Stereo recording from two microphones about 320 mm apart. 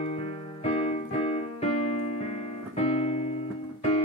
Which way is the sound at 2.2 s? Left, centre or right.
Centre.